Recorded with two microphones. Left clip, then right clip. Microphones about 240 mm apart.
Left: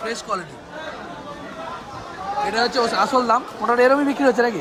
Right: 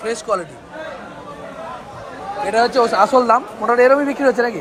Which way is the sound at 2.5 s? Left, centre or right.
Centre.